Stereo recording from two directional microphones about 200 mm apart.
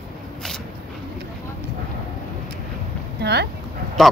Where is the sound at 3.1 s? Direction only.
55° right (ahead or behind).